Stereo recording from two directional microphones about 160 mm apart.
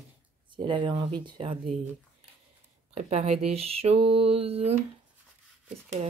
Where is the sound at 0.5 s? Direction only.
30° right (ahead or behind).